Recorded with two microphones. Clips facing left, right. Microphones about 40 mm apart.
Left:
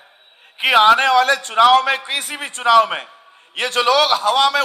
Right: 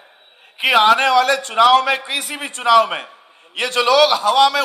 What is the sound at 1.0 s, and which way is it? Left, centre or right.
A man's voice, left.